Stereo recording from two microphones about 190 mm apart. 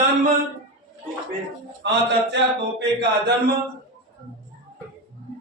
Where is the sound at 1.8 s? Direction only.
65° right (ahead or behind).